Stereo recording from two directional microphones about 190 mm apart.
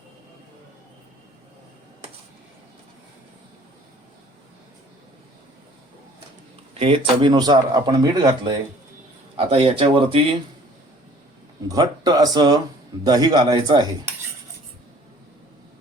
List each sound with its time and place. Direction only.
6.7 s speech: 30° right (ahead or behind)
11.7 s speech: 20° right (ahead or behind)